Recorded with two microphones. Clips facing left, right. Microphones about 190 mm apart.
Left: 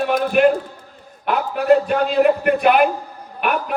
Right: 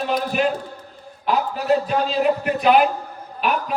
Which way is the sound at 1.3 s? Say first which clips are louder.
Left 4 dB; 60° left (ahead or behind).